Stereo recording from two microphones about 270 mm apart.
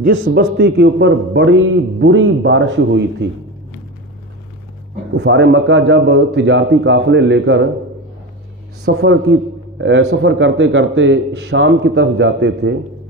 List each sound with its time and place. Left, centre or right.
0.0 s a man's voice: right
5.1 s a man's voice: right
8.8 s a man's voice: right